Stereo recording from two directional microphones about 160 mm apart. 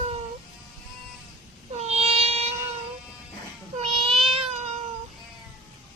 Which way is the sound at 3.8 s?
35° right (ahead or behind).